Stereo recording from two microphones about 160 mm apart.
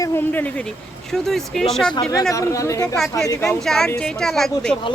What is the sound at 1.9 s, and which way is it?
Speech, 20° left (ahead or behind).